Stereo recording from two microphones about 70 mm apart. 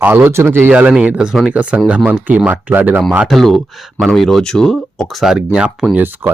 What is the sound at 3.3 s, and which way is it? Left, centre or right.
Speech, centre.